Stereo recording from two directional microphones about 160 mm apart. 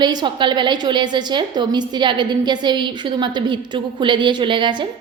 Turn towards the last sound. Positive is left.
turn(degrees=-30)  # may be behind; listen again after turning